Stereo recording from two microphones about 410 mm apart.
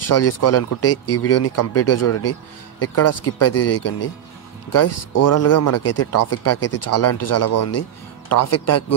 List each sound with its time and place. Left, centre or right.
0.0 s speech: left